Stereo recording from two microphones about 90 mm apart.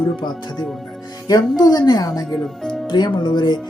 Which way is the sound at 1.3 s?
50° left (ahead or behind).